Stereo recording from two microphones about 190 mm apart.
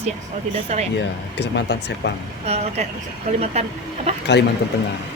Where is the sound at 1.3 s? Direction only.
65° left (ahead or behind).